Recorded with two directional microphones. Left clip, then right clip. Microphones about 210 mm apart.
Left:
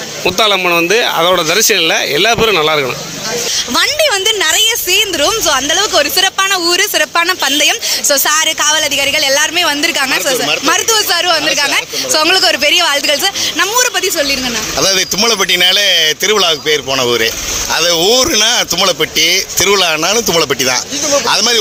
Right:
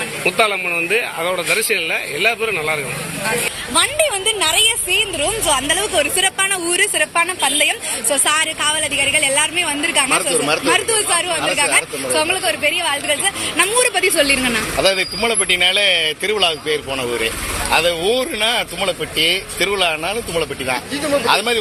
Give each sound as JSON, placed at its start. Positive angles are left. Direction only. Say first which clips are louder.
{"t": 0.3, "sound": "speech", "louder": "left 6 dB", "side_deg": 55}
{"t": 3.8, "sound": "speech", "louder": "left 4 dB", "side_deg": 45}
{"t": 13.6, "sound": "speech", "louder": "left 2 dB", "side_deg": 30}
{"t": 14.8, "sound": "speech", "louder": "left 5 dB", "side_deg": 50}